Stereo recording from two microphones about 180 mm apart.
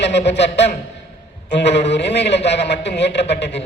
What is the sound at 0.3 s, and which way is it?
Speech, 75° left (ahead or behind).